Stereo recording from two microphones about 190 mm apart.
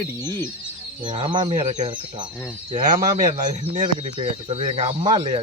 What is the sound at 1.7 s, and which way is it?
Speech, 40° right (ahead or behind).